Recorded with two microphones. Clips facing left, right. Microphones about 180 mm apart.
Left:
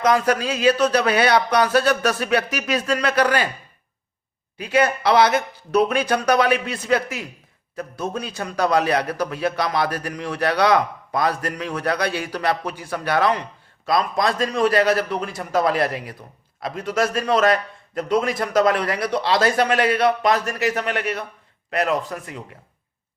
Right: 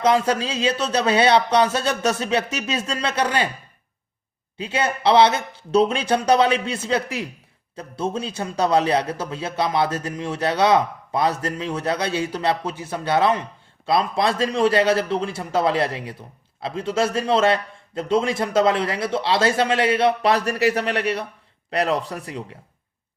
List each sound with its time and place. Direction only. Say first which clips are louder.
0.0 s a man's voice: even; 25° right (ahead or behind)
4.5 s a man's voice: left 4 dB; 25° right (ahead or behind)